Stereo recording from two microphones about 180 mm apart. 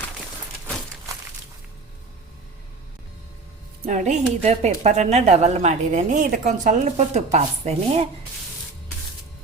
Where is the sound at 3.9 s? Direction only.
40° right (ahead or behind).